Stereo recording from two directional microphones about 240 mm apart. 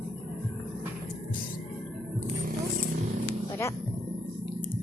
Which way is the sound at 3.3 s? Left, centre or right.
Centre.